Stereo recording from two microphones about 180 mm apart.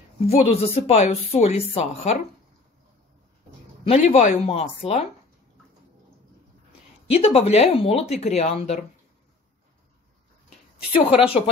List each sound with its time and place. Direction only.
0.3 s a woman's voice: 35° left (ahead or behind)
3.8 s a woman's voice: 35° left (ahead or behind)
7.1 s a woman's voice: 35° left (ahead or behind)
10.9 s a woman's voice: 30° left (ahead or behind)